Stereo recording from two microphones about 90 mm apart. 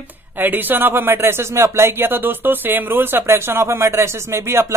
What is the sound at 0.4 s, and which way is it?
Speech, 20° right (ahead or behind).